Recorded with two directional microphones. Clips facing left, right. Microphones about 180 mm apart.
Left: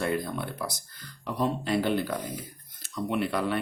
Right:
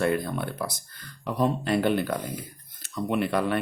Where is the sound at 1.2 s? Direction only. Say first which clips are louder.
Right 3 dB; 55° right (ahead or behind).